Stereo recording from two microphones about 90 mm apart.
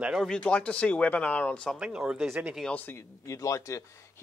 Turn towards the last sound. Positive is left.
turn(degrees=35)  # may be behind; listen again after turning